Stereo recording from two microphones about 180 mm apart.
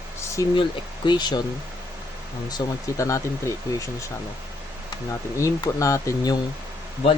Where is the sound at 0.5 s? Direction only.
25° left (ahead or behind).